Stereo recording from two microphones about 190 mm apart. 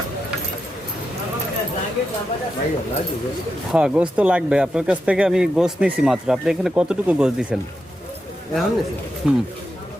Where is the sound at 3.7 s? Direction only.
5° right (ahead or behind).